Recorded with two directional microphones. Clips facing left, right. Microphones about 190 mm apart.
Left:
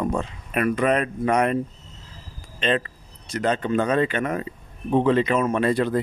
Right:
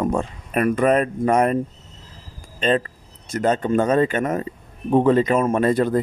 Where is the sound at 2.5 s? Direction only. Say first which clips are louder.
Right 3 dB; 40° right (ahead or behind).